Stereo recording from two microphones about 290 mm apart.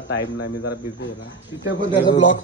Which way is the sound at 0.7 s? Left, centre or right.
Left.